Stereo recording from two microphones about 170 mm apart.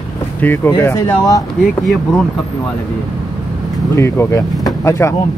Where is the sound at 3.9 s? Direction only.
15° left (ahead or behind).